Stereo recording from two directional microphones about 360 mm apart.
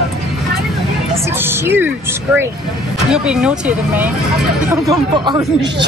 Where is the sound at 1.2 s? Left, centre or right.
Centre.